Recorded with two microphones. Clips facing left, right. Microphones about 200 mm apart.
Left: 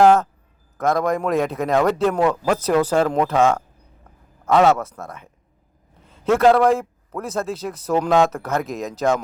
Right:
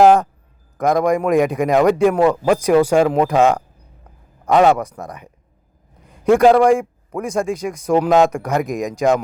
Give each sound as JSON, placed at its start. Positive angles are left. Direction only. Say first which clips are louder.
{"t": 0.0, "sound": "a man's voice", "louder": "right 2 dB", "side_deg": -15}